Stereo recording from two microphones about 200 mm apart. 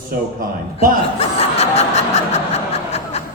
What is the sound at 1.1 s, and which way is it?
Snicker, 30° left (ahead or behind).